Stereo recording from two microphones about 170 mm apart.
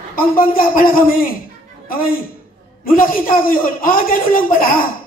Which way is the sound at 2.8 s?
55° left (ahead or behind).